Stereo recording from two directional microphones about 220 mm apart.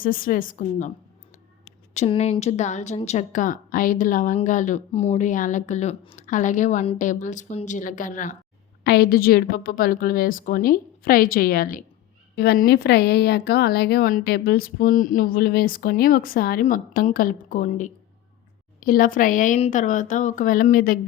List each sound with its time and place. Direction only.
0.0 s speech: 40° left (ahead or behind)